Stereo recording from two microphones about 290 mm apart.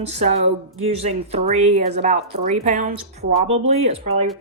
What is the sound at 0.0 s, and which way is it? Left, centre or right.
Speech, right.